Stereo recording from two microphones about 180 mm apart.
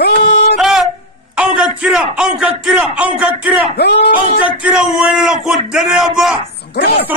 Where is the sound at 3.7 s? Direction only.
65° left (ahead or behind).